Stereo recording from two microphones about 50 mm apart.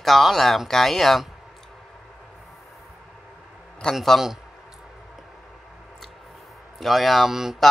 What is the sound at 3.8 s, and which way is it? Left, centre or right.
Speech, centre.